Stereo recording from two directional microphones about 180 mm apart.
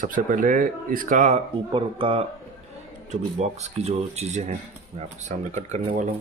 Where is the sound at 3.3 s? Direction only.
40° right (ahead or behind).